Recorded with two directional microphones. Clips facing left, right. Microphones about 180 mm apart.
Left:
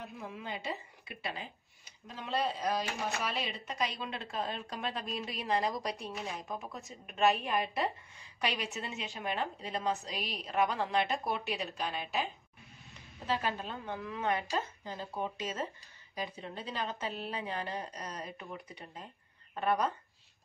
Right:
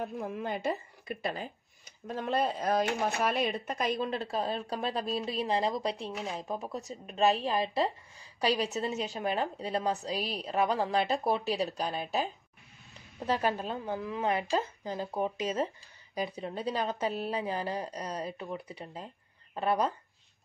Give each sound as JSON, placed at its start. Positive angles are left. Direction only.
{"t": 0.0, "sound": "a woman's voice", "side_deg": -50}
{"t": 13.3, "sound": "speech", "side_deg": -40}